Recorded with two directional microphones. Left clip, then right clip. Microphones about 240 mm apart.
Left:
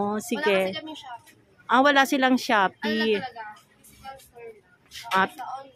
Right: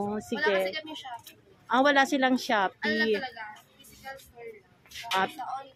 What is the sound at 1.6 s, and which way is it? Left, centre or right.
A woman's voice, centre.